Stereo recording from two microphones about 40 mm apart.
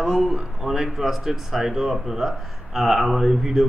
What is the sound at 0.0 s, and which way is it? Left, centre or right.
A man's voice, centre.